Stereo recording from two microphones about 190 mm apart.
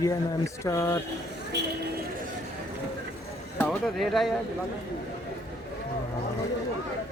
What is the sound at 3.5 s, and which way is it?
Speech, 5° left (ahead or behind).